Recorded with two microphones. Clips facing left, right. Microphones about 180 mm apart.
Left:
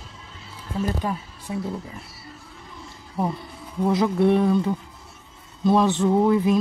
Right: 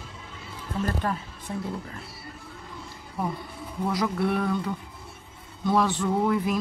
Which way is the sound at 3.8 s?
25° left (ahead or behind).